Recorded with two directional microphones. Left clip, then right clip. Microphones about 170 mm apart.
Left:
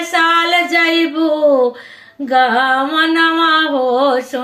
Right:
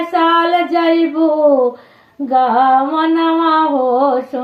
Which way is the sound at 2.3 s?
25° left (ahead or behind).